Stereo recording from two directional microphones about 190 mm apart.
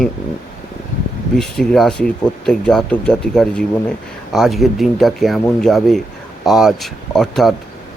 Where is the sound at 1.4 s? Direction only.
5° left (ahead or behind).